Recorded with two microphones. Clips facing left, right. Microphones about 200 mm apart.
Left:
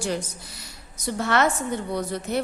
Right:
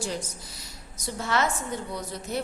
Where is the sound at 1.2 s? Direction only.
65° left (ahead or behind).